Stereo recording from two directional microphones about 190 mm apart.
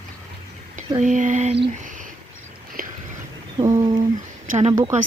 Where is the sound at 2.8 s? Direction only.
50° right (ahead or behind).